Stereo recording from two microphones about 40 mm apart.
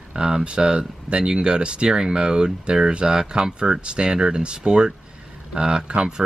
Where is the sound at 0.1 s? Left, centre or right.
Centre.